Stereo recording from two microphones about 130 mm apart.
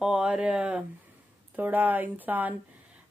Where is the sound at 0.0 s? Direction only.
5° right (ahead or behind).